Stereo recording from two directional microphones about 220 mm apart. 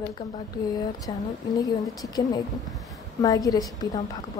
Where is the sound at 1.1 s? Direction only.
20° left (ahead or behind).